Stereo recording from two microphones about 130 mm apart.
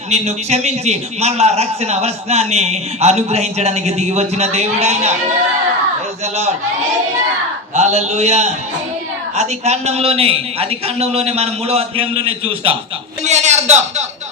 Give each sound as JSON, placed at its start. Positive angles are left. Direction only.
{"t": 0.1, "sound": "a man's voice", "side_deg": -55}
{"t": 7.8, "sound": "a man's voice", "side_deg": -60}
{"t": 13.2, "sound": "a sound", "side_deg": -60}